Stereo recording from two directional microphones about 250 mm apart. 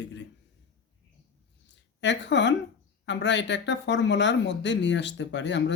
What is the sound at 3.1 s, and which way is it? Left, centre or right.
Speech, left.